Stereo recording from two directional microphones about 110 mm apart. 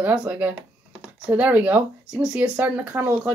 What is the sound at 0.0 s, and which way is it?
Speech, 10° right (ahead or behind).